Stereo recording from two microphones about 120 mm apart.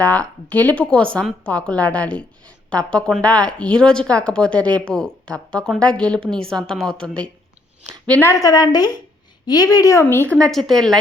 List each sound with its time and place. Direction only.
0.0 s a woman's voice: 10° left (ahead or behind)
8.2 s a woman's voice: 30° left (ahead or behind)
10.3 s a woman's voice: 5° left (ahead or behind)